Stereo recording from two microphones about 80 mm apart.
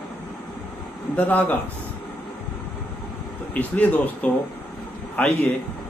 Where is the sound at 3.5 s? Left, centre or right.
Centre.